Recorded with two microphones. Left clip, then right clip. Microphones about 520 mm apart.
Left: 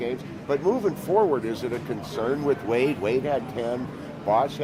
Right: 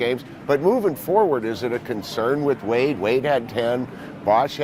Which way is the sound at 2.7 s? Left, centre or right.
Right.